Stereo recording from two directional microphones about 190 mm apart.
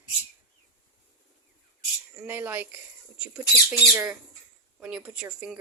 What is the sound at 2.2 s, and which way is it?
Speech, 10° right (ahead or behind).